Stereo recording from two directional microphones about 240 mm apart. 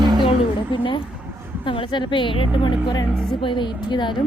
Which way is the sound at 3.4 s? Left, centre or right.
Left.